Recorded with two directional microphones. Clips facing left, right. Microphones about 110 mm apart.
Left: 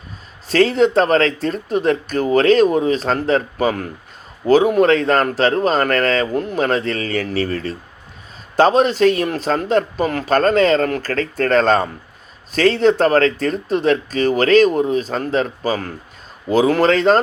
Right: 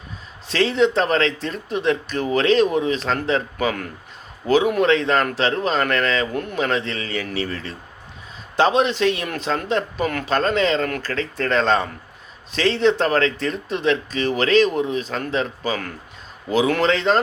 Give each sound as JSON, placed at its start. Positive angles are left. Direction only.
{"t": 0.4, "sound": "speech", "side_deg": 45}
{"t": 10.3, "sound": "speech", "side_deg": 45}